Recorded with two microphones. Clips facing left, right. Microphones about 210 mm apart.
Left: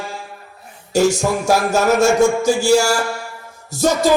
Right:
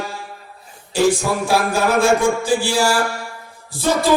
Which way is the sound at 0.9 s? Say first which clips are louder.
Left 1 dB; 45° left (ahead or behind).